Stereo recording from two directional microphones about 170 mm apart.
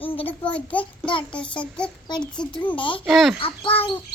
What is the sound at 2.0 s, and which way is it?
Child singing, 25° left (ahead or behind).